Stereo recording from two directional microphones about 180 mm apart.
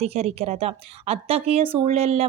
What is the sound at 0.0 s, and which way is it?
Speech, 35° right (ahead or behind).